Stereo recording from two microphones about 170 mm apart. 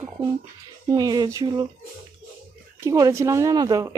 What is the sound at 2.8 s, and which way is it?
Speech, 15° right (ahead or behind).